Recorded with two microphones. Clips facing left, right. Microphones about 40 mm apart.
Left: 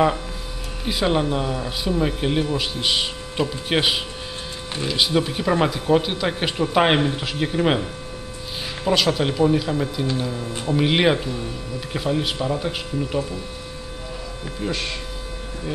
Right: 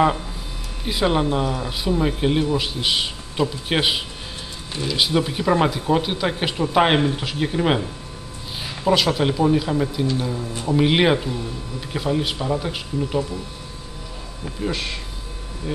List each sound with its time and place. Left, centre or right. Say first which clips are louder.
0.8 s speech: right 1 dB; centre
14.6 s speech: right 1 dB; centre